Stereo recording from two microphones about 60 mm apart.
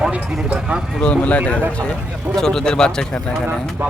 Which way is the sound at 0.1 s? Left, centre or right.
Right.